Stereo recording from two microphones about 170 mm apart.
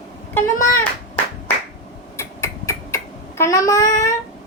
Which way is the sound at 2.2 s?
15° left (ahead or behind).